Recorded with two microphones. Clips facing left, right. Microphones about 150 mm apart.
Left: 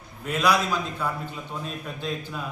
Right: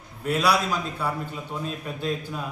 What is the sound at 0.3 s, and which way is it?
A man's voice, 10° right (ahead or behind).